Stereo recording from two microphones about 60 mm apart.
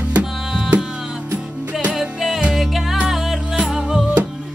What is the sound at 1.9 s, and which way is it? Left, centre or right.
Music, centre.